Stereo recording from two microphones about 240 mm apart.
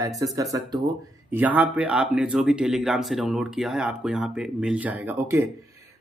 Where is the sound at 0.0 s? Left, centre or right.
Centre.